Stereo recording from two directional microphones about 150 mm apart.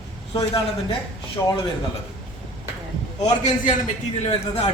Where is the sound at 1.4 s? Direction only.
20° left (ahead or behind).